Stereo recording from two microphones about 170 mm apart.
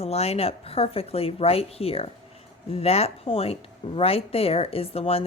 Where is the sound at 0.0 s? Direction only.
40° left (ahead or behind).